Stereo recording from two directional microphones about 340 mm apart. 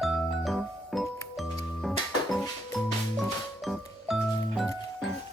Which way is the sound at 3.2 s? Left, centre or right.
Centre.